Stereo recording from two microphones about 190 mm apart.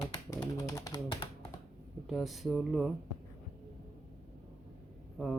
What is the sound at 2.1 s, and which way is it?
Speech, centre (ahead or behind).